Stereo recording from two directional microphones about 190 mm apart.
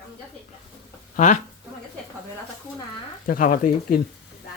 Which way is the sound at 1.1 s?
40° left (ahead or behind).